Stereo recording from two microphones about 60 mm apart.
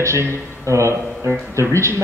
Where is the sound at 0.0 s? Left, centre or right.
Right.